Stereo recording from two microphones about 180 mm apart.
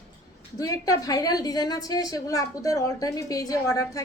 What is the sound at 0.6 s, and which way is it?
A woman's voice, 20° left (ahead or behind).